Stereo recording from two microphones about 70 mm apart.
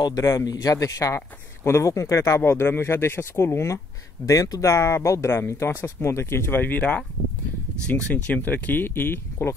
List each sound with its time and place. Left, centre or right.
0.2 s a man's voice: left
0.5 s speech: left
0.8 s speech: left
4.3 s speech: left
8.1 s speech: left